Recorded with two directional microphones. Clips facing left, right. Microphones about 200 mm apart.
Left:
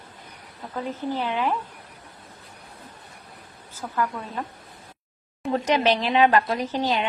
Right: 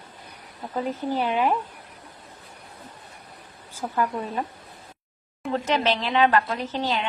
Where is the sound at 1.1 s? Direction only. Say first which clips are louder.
Right 3 dB; 15° right (ahead or behind).